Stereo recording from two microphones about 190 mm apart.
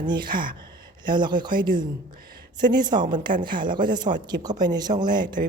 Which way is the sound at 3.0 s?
25° right (ahead or behind).